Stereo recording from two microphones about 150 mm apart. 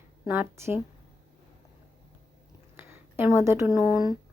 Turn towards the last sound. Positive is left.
turn(degrees=-25)  # may be behind; listen again after turning